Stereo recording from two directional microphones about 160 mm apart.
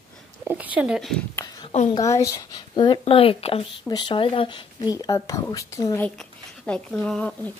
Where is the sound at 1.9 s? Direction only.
20° left (ahead or behind).